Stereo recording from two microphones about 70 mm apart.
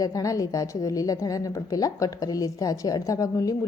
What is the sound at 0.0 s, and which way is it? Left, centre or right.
A woman's voice, left.